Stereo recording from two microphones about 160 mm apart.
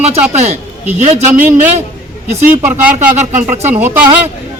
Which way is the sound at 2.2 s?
45° right (ahead or behind).